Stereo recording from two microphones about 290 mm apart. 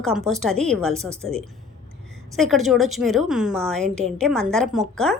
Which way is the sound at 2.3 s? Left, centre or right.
Centre.